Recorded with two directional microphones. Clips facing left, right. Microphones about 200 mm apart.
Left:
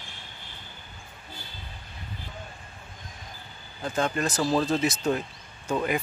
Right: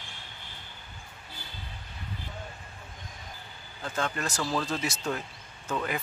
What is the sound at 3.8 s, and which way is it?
Speech, 20° left (ahead or behind).